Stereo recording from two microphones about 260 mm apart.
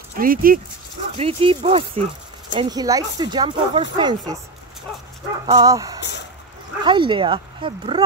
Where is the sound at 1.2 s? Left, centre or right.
Right.